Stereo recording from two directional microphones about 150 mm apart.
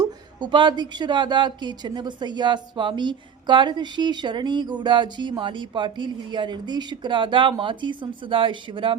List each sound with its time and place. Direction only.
0.0 s speech: 30° right (ahead or behind)